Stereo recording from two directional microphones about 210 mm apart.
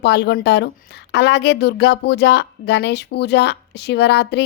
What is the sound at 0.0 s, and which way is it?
Speech, 55° left (ahead or behind).